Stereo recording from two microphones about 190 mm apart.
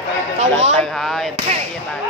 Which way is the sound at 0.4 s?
35° right (ahead or behind).